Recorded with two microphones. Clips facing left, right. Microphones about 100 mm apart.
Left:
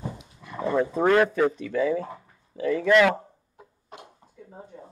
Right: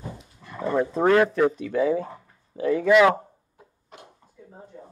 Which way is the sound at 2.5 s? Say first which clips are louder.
Right 2 dB; 40° right (ahead or behind).